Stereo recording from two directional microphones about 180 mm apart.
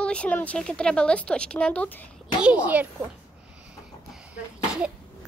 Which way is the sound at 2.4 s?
10° right (ahead or behind).